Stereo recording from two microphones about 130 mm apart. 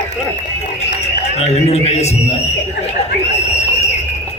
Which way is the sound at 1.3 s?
55° left (ahead or behind).